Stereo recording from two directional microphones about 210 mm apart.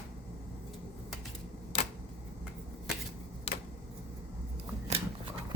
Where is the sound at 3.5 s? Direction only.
30° left (ahead or behind).